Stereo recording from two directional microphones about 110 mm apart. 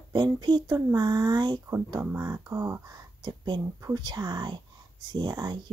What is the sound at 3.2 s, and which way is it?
Speech, 40° right (ahead or behind).